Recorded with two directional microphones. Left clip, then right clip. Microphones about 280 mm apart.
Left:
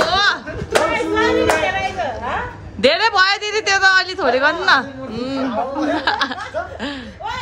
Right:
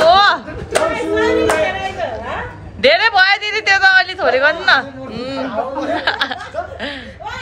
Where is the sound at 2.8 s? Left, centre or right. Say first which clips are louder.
Right 3 dB; centre.